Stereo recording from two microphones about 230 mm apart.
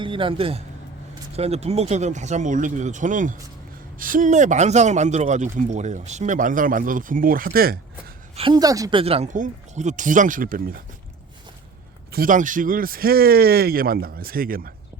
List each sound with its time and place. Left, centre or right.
0.0 s a man's voice: right
8.4 s a man's voice: centre; by 10.8 s right
12.1 s a man's voice: right